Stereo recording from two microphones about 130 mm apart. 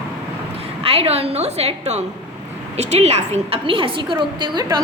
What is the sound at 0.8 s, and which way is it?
A woman's voice, 50° right (ahead or behind).